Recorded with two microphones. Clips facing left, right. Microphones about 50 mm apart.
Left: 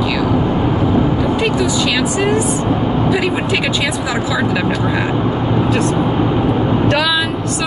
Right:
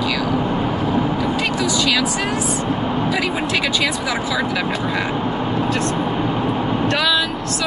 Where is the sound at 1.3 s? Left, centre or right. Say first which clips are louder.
Left 4 dB; centre.